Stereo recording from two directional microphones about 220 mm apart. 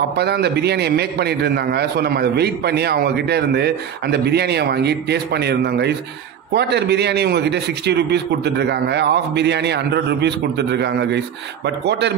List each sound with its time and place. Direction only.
0.2 s a man's voice: 50° right (ahead or behind)